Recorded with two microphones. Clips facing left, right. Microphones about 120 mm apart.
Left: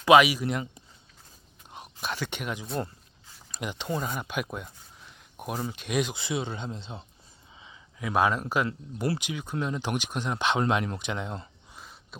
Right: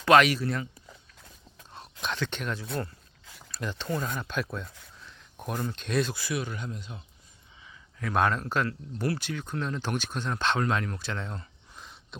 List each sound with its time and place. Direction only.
0.0 s speech: 10° left (ahead or behind)
1.7 s speech: 10° left (ahead or behind); by 7.0 s 25° left (ahead or behind)
7.9 s speech: 10° left (ahead or behind)